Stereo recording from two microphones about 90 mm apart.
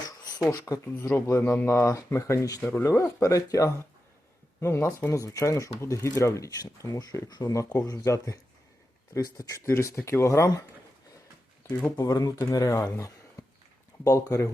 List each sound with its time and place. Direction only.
0.6 s speech: 35° left (ahead or behind)
3.0 s speech: 35° left (ahead or behind)
11.9 s speech: 45° left (ahead or behind)
12.5 s speech: 35° left (ahead or behind)